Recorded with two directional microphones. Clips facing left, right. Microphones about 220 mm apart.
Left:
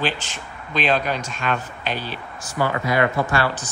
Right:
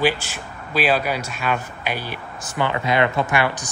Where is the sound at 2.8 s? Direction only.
20° right (ahead or behind).